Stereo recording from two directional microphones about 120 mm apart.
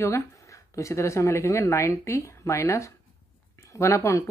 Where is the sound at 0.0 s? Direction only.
25° left (ahead or behind).